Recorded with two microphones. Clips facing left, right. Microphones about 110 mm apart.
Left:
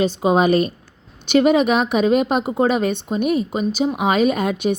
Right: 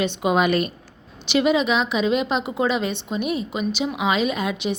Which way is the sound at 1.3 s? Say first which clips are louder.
Left 4 dB; 50° left (ahead or behind).